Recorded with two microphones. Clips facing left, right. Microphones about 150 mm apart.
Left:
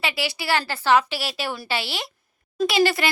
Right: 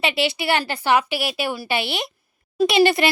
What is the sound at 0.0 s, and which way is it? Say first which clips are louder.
A woman's voice: right 5 dB; 25° right (ahead or behind).